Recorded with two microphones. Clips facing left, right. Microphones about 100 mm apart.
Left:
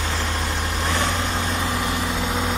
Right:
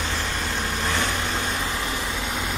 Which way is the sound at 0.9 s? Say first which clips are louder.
Left 2 dB; 20° left (ahead or behind).